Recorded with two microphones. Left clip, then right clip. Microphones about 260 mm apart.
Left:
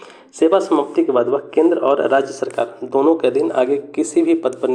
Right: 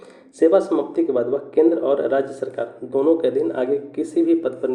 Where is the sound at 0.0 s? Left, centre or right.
Centre.